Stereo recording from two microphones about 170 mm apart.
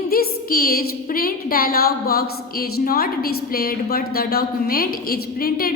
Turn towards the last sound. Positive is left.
turn(degrees=60)  # may be behind; listen again after turning